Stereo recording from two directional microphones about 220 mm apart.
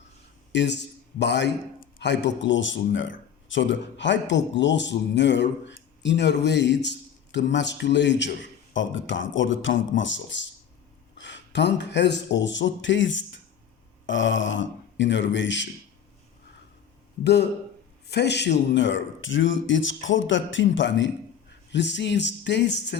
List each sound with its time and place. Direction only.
0.5 s a man's voice: 50° left (ahead or behind)
18.1 s a man's voice: 50° left (ahead or behind)